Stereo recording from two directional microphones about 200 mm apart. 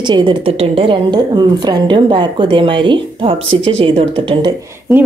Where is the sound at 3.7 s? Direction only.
30° right (ahead or behind).